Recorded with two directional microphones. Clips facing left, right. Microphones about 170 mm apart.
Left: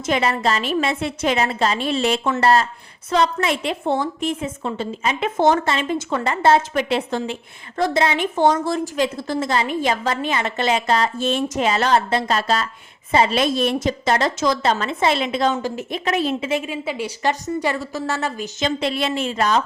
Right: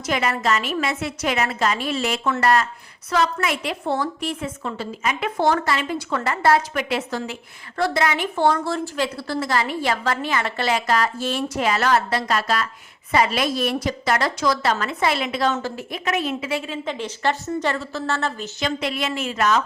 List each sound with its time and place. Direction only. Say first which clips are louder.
0.0 s a woman's voice: left 3 dB; 25° left (ahead or behind)
18.8 s a woman's voice: left 3 dB; 30° left (ahead or behind)